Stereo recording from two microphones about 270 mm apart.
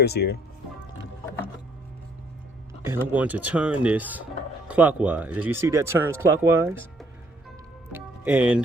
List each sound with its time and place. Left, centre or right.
0.0 s speech: left
2.8 s speech: centre
7.9 s music: centre